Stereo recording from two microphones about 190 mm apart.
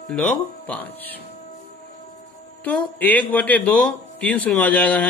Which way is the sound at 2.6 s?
10° left (ahead or behind).